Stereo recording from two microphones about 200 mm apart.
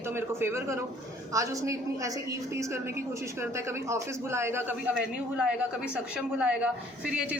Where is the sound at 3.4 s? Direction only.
15° right (ahead or behind).